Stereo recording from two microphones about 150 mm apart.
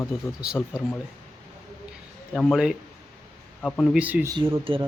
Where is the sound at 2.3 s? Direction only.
Centre (ahead or behind).